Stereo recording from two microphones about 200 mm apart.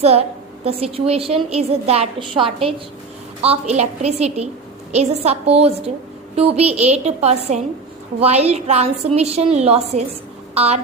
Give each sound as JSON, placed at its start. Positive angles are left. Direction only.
{"t": 0.0, "sound": "a woman's voice", "side_deg": -30}